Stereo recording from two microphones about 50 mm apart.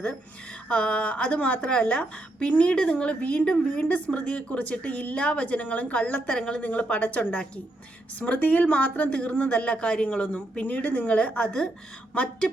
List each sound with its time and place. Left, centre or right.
0.7 s a woman's voice: left
6.2 s a woman's voice: centre